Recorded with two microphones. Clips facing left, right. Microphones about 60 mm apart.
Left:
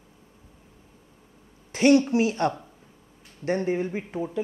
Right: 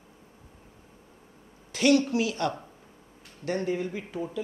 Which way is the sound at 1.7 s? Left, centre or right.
Left.